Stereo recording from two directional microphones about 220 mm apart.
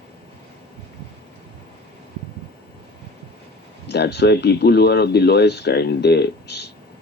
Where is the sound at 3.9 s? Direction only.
50° left (ahead or behind).